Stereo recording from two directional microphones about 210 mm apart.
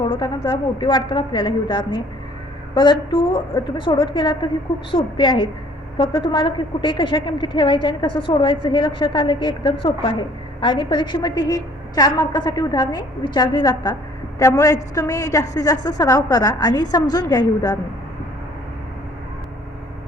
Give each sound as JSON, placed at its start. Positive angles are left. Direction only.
{"t": 0.0, "sound": "a woman's voice", "side_deg": 20}